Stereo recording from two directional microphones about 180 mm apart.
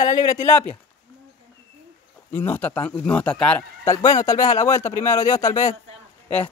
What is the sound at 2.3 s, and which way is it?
Speech, 10° left (ahead or behind).